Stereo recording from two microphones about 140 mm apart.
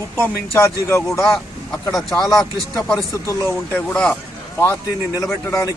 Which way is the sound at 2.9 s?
20° left (ahead or behind).